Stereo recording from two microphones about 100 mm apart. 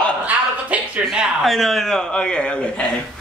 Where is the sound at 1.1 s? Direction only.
5° right (ahead or behind).